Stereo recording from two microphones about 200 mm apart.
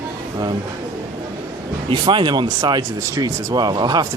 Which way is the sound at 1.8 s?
25° right (ahead or behind).